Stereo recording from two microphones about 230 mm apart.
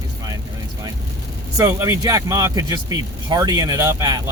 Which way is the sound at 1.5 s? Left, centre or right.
Centre.